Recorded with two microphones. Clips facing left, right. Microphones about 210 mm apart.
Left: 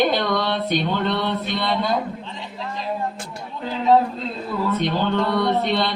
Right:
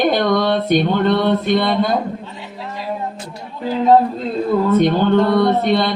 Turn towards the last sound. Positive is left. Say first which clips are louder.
# right 5 dB
turn(degrees=-50)  # may be behind; listen again after turning